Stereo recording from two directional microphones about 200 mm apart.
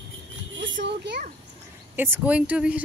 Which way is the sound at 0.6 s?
65° right (ahead or behind).